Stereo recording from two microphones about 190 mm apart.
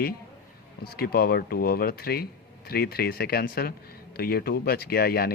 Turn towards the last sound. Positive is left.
turn(degrees=55)  # may be behind; listen again after turning